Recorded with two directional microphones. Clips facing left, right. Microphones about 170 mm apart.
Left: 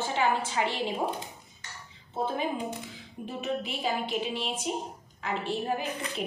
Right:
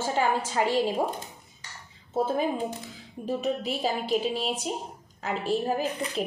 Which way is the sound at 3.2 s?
40° right (ahead or behind).